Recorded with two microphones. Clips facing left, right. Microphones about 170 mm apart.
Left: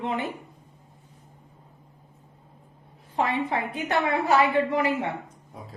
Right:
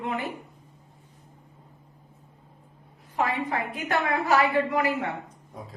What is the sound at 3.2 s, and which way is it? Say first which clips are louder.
A woman's voice: left 1 dB; 25° left (ahead or behind).